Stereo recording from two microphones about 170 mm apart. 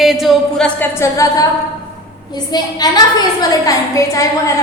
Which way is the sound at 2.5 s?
25° left (ahead or behind).